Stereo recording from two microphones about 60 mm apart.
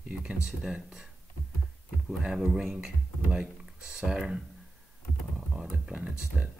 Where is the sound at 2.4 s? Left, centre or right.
Centre.